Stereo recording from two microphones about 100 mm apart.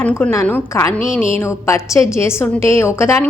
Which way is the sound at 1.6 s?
30° left (ahead or behind).